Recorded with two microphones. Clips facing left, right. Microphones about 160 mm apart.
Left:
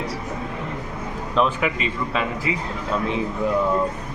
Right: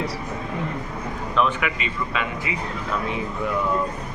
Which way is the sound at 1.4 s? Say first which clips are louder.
Left 2 dB; 35° left (ahead or behind).